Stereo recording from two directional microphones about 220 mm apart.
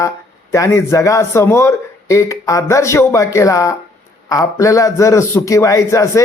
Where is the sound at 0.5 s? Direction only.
10° left (ahead or behind).